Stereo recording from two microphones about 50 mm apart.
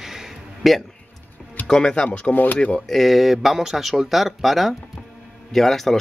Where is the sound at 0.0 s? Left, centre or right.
Centre.